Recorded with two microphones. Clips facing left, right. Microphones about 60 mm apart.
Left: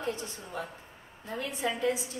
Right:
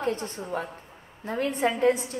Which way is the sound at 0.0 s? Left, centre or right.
Right.